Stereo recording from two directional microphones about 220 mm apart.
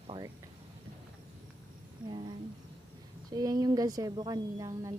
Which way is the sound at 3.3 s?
15° right (ahead or behind).